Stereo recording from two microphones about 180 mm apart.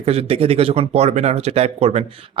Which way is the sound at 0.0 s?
35° right (ahead or behind).